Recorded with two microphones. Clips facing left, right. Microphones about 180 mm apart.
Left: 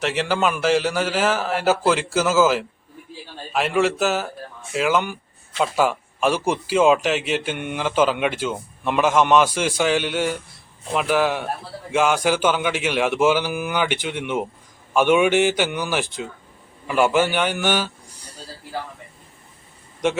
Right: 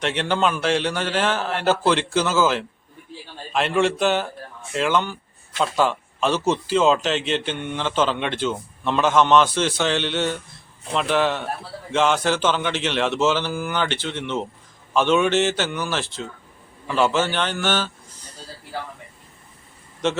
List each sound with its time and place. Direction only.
0.0 s a man's voice: 5° left (ahead or behind)
20.0 s a man's voice: 10° left (ahead or behind)